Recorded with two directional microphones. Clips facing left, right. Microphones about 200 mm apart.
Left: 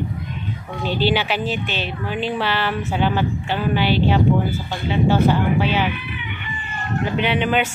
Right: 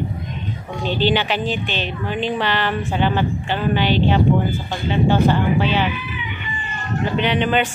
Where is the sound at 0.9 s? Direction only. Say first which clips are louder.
Right 1 dB; 10° left (ahead or behind).